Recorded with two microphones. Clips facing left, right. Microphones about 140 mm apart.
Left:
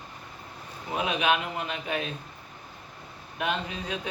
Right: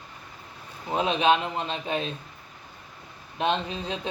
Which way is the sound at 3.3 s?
25° right (ahead or behind).